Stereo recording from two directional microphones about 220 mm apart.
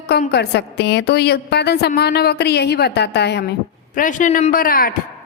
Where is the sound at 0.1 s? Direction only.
45° left (ahead or behind).